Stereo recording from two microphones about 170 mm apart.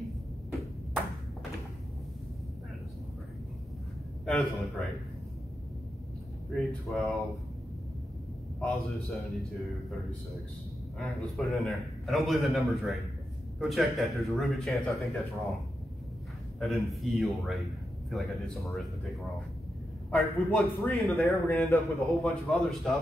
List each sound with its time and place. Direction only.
4.3 s a man's voice: centre (ahead or behind)
6.5 s a man's voice: centre (ahead or behind)
9.1 s a man's voice: centre (ahead or behind)
11.0 s a man's voice: centre (ahead or behind)
16.5 s a man's voice: centre (ahead or behind)
21.5 s speech: 15° left (ahead or behind)
21.8 s a man's voice: centre (ahead or behind)